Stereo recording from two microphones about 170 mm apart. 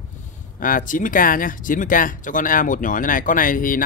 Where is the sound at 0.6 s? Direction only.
55° left (ahead or behind).